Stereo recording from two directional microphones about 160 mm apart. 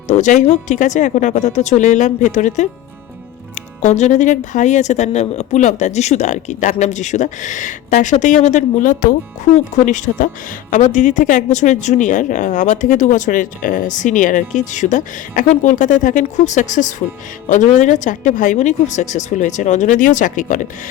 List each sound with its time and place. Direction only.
0.1 s a woman's voice: 50° left (ahead or behind)